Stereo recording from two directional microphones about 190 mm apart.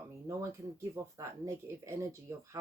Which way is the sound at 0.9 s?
15° right (ahead or behind).